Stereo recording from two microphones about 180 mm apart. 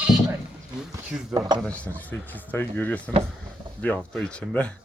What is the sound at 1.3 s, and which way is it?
Speech, 20° right (ahead or behind).